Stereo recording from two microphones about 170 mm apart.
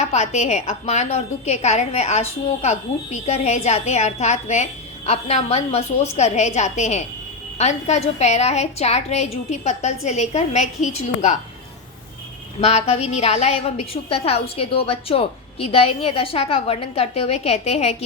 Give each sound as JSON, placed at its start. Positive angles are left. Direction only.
{"t": 0.0, "sound": "a woman's voice", "side_deg": 40}
{"t": 12.5, "sound": "a woman's voice", "side_deg": 40}